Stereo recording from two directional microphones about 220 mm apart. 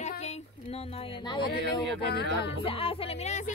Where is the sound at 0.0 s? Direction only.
30° left (ahead or behind).